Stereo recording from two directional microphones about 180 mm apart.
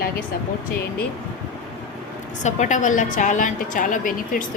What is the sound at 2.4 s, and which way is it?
Speech, 40° left (ahead or behind).